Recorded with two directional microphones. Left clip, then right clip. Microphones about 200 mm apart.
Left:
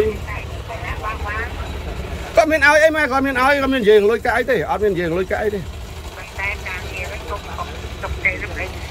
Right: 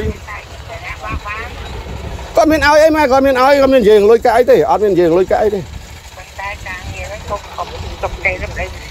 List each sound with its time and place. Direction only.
2.3 s a man's voice: 30° right (ahead or behind)
8.0 s speech: 35° right (ahead or behind)